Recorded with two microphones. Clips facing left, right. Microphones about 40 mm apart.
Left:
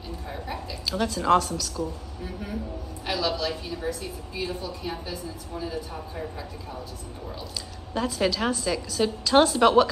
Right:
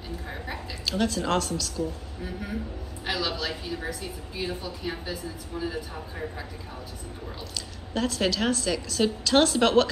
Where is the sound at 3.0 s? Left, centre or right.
Centre.